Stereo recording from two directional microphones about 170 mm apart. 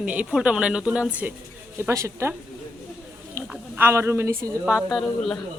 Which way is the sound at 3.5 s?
10° right (ahead or behind).